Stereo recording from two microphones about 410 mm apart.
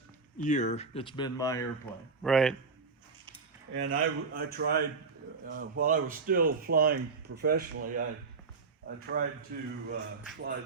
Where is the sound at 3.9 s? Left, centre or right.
Right.